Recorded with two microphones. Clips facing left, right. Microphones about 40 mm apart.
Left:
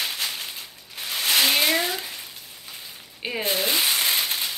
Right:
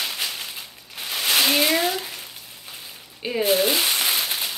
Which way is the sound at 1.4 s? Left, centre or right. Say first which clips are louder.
Right 2 dB; centre.